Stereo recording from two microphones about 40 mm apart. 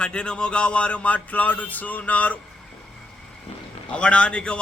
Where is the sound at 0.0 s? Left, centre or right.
Left.